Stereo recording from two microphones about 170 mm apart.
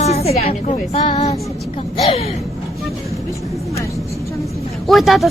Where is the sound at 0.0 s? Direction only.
40° left (ahead or behind).